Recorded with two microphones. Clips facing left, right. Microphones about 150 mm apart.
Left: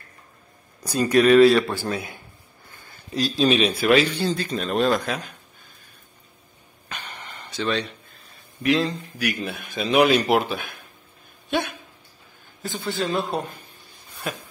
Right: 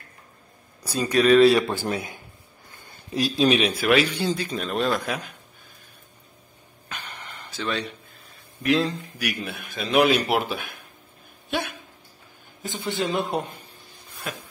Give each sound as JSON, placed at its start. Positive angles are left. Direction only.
{"t": 1.0, "sound": "a man's voice", "side_deg": 5}
{"t": 1.6, "sound": "a man's voice", "side_deg": -15}
{"t": 7.3, "sound": "a man's voice", "side_deg": -5}
{"t": 12.6, "sound": "a man's voice", "side_deg": -20}